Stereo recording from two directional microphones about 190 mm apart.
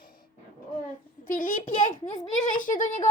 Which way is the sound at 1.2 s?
45° left (ahead or behind).